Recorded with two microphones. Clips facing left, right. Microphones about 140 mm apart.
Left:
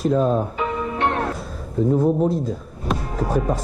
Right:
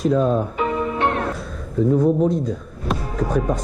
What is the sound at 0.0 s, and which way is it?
Speech, centre (ahead or behind).